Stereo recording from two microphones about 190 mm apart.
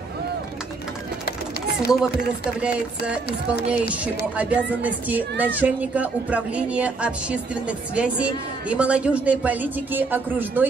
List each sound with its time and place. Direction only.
3.3 s speech: 55° left (ahead or behind)
4.4 s a woman's voice: 5° right (ahead or behind)